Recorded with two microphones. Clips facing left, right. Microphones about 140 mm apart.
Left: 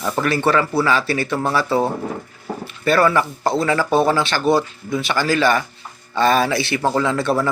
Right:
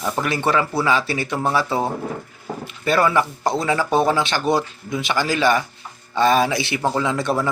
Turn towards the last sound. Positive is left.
turn(degrees=-20)  # may be behind; listen again after turning